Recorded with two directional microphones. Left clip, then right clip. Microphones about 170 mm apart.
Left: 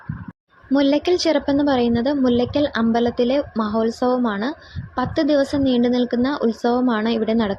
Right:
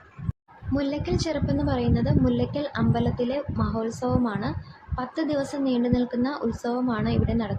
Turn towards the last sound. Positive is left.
turn(degrees=40)  # may be behind; listen again after turning